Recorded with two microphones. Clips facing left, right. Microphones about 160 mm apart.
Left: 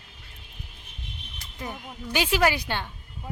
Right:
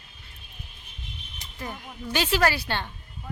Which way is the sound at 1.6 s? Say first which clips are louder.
Even; 15° left (ahead or behind).